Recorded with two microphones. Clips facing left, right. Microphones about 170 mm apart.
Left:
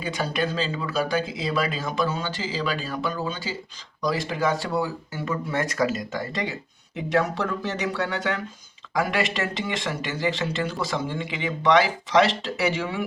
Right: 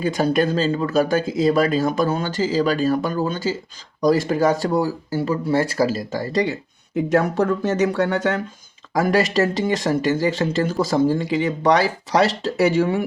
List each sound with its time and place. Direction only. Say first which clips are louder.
0.0 s speech: right 8 dB; 45° right (ahead or behind)
6.9 s speech: right 6 dB; 45° right (ahead or behind)